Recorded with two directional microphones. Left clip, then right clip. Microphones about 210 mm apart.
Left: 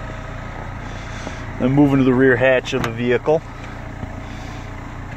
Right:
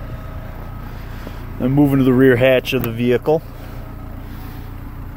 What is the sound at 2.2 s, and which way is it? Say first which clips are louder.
Speech: right 3 dB; 45° right (ahead or behind).